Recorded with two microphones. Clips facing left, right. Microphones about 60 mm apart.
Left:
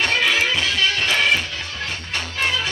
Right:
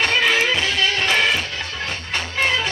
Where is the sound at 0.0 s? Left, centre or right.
Right.